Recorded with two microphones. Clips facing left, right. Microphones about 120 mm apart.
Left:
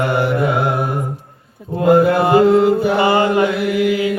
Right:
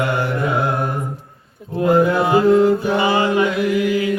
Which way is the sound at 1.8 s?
70° left (ahead or behind).